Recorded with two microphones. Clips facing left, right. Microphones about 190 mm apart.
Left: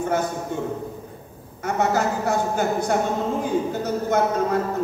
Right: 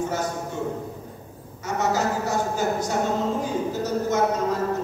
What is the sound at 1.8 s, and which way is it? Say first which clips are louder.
Speech: left 2 dB; 55° left (ahead or behind).